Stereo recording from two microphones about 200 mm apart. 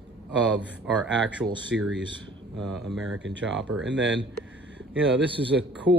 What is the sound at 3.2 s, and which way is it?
Speech, 70° right (ahead or behind).